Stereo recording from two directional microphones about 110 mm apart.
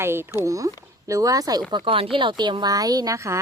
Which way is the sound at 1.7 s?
50° right (ahead or behind).